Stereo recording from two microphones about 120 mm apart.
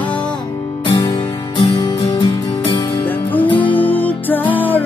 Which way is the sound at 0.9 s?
40° left (ahead or behind).